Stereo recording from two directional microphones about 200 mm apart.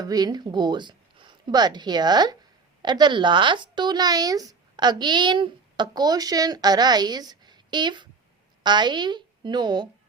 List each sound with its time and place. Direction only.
0.0 s speech: 20° right (ahead or behind)